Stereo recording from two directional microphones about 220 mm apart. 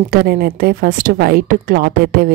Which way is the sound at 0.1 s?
40° right (ahead or behind).